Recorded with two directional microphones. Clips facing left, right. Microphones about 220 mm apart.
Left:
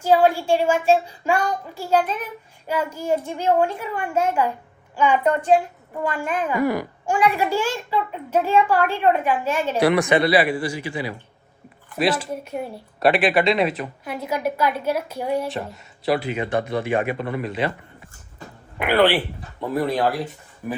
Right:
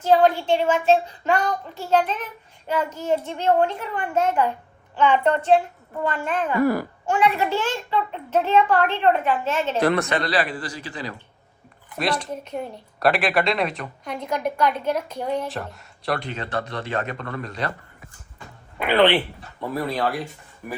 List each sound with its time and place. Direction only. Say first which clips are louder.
0.0 s a child's voice: even; 10° left (ahead or behind)
18.8 s speech: even; 10° left (ahead or behind)
19.7 s speech: left 4 dB; 20° left (ahead or behind)